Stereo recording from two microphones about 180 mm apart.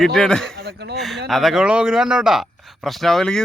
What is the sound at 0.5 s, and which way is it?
Speech, 65° right (ahead or behind).